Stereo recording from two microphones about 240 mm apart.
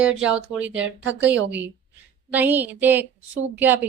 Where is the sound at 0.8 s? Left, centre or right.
Right.